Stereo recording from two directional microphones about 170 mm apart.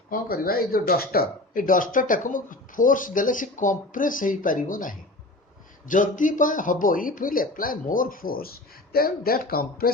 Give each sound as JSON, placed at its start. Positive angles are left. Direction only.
{"t": 0.1, "sound": "speech", "side_deg": 60}